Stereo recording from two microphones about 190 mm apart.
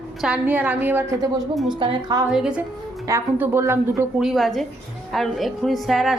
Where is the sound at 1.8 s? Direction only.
25° right (ahead or behind).